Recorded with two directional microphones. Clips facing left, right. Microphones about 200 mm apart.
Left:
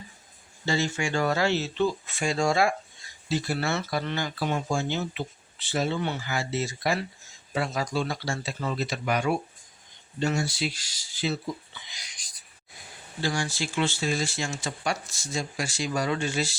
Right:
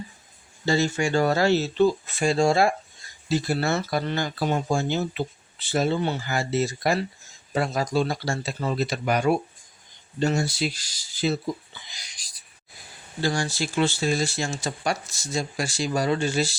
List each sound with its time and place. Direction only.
0.6 s speech: 40° right (ahead or behind)
13.2 s speech: 40° right (ahead or behind)